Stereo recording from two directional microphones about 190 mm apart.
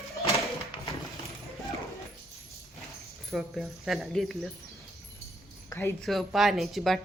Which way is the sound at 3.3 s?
Centre (ahead or behind).